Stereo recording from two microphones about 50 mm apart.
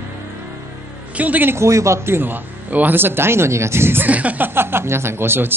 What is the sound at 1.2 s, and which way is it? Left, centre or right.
Speech, right.